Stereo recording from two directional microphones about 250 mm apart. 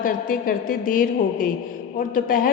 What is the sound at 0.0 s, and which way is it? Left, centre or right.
A woman's voice, left.